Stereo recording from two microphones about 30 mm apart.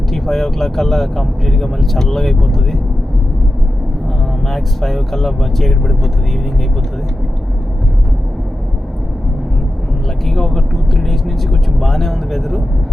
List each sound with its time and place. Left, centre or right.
0.1 s speech: centre
4.4 s speech: centre
10.2 s speech: centre